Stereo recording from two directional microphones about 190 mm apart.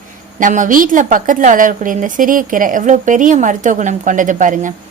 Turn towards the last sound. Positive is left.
turn(degrees=-40)  # may be behind; listen again after turning